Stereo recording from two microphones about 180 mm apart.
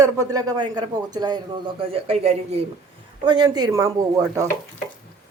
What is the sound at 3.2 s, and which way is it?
Speech, 25° right (ahead or behind).